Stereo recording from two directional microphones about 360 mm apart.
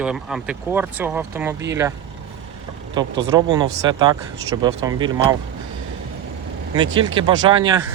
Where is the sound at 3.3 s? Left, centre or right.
Centre.